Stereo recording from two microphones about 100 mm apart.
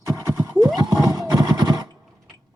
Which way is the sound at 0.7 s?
40° right (ahead or behind).